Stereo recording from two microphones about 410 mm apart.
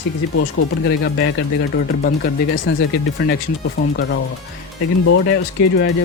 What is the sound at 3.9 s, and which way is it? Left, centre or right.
Speech, left.